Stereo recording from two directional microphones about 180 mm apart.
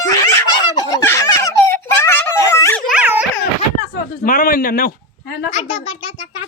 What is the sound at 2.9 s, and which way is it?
Dog, 10° right (ahead or behind).